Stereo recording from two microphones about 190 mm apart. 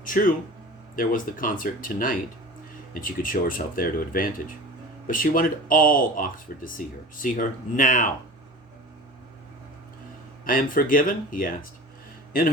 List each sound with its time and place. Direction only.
0.0 s speech: 45° left (ahead or behind)
10.4 s speech: 45° left (ahead or behind)